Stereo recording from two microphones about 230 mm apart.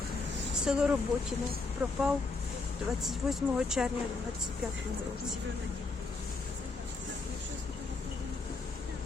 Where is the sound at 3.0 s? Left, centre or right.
Centre.